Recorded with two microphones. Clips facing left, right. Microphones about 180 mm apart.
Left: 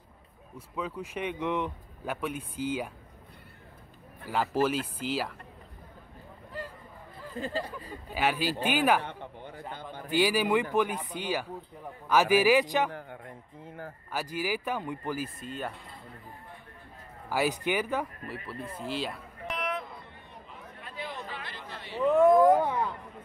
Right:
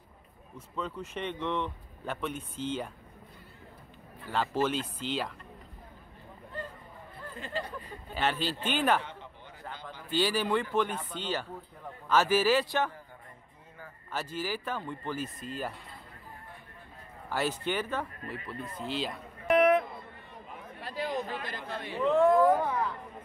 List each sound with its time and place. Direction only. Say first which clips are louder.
0.6 s speech: left 1 dB; 10° left (ahead or behind)
4.3 s speech: left 2 dB; 10° left (ahead or behind)
7.3 s speech: left 4 dB; 35° left (ahead or behind)
8.1 s speech: left 2 dB; 10° left (ahead or behind)
10.0 s speech: left 3 dB; 10° left (ahead or behind)
12.9 s a sound: left 8 dB; 65° left (ahead or behind)
14.1 s speech: left 2 dB; 10° left (ahead or behind)
17.3 s speech: left 3 dB; 10° left (ahead or behind)
19.5 s a sound: right 12 dB; 55° right (ahead or behind)
20.8 s a sound: right 6 dB; 35° right (ahead or behind)
21.9 s cat: left 3 dB; 15° left (ahead or behind)